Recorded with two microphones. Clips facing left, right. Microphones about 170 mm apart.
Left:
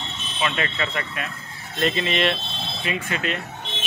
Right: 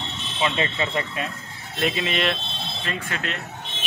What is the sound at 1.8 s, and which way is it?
A man's voice, 5° right (ahead or behind).